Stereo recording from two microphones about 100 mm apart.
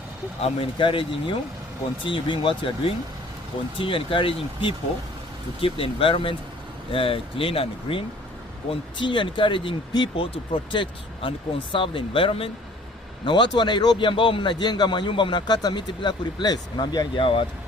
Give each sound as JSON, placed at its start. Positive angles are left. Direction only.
{"t": 0.4, "sound": "speech", "side_deg": 65}
{"t": 8.7, "sound": "speech", "side_deg": 55}
{"t": 13.2, "sound": "a man's voice", "side_deg": 50}